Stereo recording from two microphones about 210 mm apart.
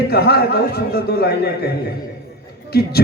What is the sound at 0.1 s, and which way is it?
A man's voice, 50° left (ahead or behind).